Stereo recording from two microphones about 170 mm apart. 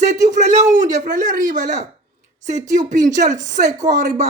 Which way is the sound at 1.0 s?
50° right (ahead or behind).